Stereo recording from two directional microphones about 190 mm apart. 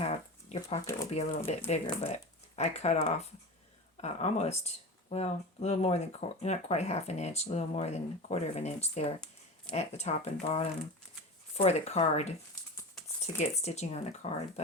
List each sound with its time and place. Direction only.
0.0 s a sound: 35° left (ahead or behind)
1.1 s speech: 35° left (ahead or behind)
13.4 s speech: 35° left (ahead or behind)